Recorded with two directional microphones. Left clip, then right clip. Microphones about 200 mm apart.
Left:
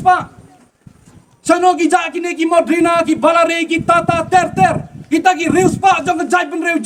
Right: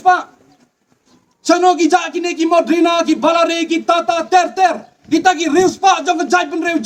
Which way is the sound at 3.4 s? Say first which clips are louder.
Left 1 dB; 35° left (ahead or behind).